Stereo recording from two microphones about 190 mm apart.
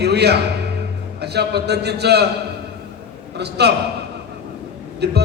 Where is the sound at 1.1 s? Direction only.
60° right (ahead or behind).